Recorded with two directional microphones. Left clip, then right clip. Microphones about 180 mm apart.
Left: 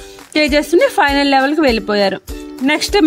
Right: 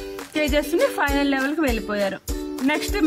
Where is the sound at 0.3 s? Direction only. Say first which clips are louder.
Left 9 dB; 35° left (ahead or behind).